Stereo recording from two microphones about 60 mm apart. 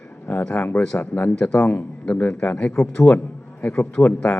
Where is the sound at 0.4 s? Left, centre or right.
Left.